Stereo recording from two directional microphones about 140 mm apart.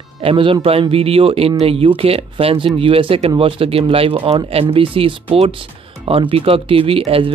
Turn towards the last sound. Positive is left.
turn(degrees=-40)  # may be behind; listen again after turning